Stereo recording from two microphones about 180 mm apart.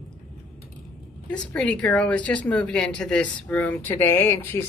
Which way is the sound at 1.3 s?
5° left (ahead or behind).